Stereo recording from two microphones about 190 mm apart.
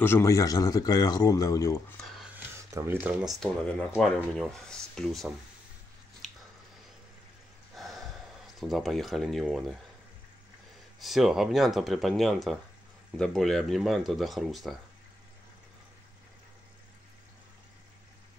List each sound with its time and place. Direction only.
0.0 s speech: 15° left (ahead or behind)
2.3 s speech: 15° right (ahead or behind); by 5.3 s centre (ahead or behind)
6.2 s a sound: centre (ahead or behind)
7.7 s a sound: centre (ahead or behind)
8.5 s speech: centre (ahead or behind)
11.0 s speech: centre (ahead or behind)